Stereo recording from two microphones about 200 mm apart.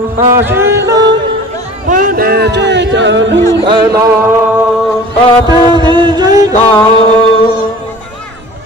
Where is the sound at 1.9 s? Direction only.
45° right (ahead or behind); by 3.3 s 65° right (ahead or behind).